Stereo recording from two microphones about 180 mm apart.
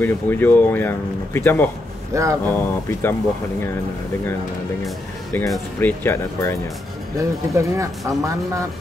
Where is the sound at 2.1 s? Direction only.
15° right (ahead or behind).